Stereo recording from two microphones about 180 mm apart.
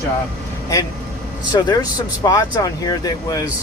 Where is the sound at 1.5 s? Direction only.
20° left (ahead or behind).